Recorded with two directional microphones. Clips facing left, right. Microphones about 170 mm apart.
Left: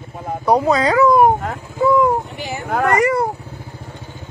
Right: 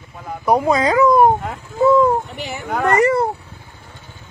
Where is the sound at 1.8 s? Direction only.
25° right (ahead or behind).